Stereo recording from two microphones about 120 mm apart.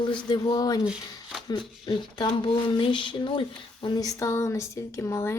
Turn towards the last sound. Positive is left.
turn(degrees=20)  # may be behind; listen again after turning